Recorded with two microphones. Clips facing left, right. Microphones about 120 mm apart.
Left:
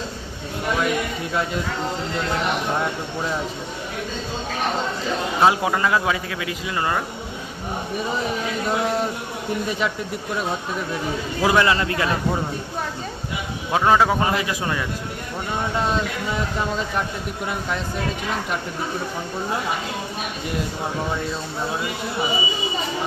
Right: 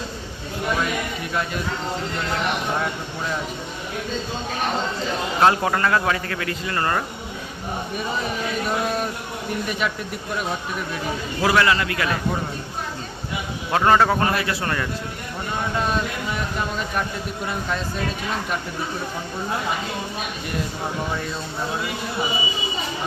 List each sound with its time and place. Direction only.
1.3 s speech: 20° left (ahead or behind)
5.4 s speech: 10° left (ahead or behind)
11.4 s speech: 20° left (ahead or behind)
13.7 s speech: 5° left (ahead or behind)
15.9 s speech: 20° left (ahead or behind)